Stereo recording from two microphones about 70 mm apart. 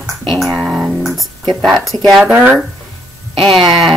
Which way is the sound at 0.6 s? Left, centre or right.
Centre.